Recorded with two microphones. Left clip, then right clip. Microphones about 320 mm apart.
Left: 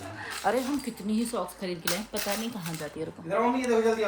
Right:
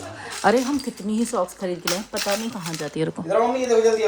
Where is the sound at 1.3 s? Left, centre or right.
Right.